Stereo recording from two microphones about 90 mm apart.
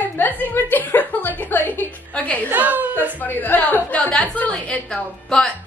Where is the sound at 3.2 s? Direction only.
20° left (ahead or behind).